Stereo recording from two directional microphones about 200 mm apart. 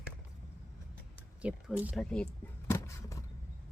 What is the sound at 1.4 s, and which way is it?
Speech, 5° right (ahead or behind).